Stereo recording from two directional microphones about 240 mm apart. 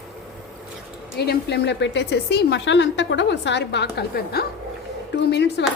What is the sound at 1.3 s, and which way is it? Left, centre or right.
A woman's voice, left.